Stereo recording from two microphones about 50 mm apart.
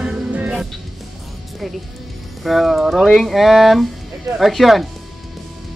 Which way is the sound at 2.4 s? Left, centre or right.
Centre.